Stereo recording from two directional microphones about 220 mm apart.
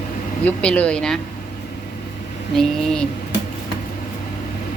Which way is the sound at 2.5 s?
Centre (ahead or behind).